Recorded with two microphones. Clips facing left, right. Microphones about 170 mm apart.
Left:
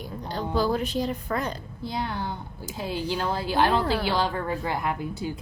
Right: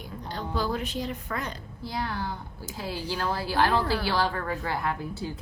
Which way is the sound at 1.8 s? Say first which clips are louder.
Left 1 dB; 20° left (ahead or behind).